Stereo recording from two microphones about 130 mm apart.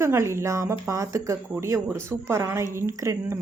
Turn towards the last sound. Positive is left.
turn(degrees=-25)  # may be behind; listen again after turning